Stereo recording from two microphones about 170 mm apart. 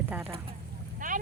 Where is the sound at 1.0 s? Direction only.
50° right (ahead or behind).